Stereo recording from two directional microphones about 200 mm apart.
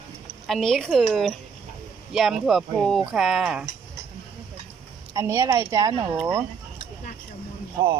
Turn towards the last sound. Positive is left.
turn(degrees=-20)  # may be behind; listen again after turning